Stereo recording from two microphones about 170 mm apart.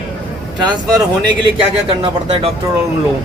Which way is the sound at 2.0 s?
35° right (ahead or behind).